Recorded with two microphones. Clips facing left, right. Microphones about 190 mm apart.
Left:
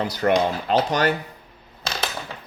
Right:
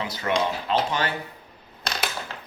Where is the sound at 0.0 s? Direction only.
40° left (ahead or behind).